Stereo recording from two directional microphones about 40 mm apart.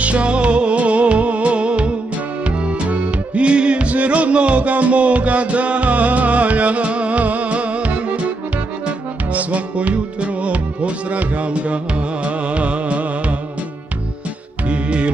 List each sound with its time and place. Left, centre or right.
0.0 s music: right
9.3 s music: right
14.7 s music: right